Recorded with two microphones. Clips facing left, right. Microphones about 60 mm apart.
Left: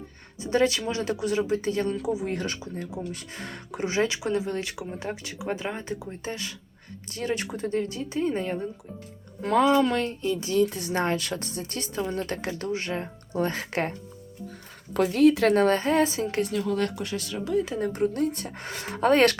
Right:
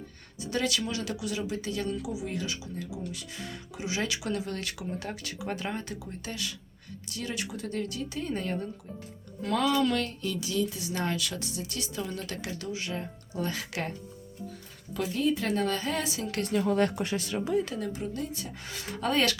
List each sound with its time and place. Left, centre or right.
0.4 s a woman's voice: left
9.4 s a woman's voice: left
10.5 s speech: left
14.9 s speech: left
15.5 s speech: left
16.5 s speech: centre
17.7 s speech: left